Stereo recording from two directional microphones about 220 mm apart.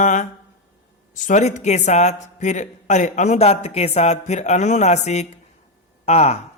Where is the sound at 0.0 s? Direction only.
35° left (ahead or behind).